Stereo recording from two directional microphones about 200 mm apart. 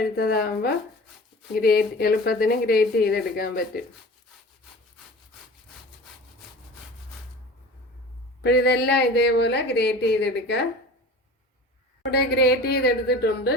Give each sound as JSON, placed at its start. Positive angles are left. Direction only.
{"t": 0.2, "sound": "speech", "side_deg": 50}
{"t": 8.4, "sound": "a woman's voice", "side_deg": 55}
{"t": 12.1, "sound": "a woman's voice", "side_deg": 55}